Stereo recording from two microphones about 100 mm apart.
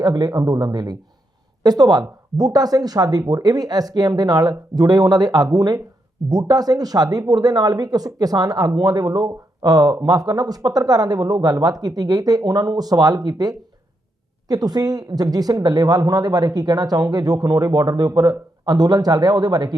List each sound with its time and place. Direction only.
0.0 s speech: 40° right (ahead or behind)